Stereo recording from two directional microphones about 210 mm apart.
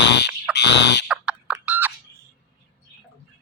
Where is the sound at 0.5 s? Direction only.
55° left (ahead or behind).